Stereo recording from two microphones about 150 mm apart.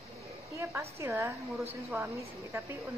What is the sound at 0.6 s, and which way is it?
A woman's voice, 15° right (ahead or behind).